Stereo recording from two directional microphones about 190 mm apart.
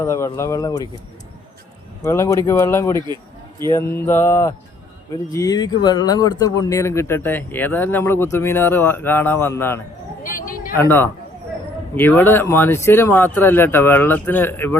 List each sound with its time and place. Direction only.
0.0 s speech: 15° left (ahead or behind)
2.0 s speech: 15° left (ahead or behind)
10.2 s a sound: 45° left (ahead or behind)
10.8 s speech: 10° left (ahead or behind)